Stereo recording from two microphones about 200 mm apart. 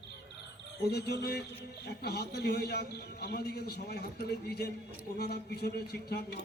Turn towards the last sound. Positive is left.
turn(degrees=50)  # may be behind; listen again after turning